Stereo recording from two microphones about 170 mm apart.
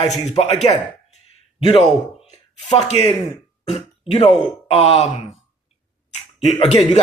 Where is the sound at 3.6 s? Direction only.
40° left (ahead or behind).